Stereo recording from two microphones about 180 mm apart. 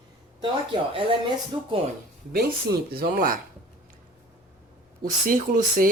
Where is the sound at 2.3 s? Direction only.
60° right (ahead or behind).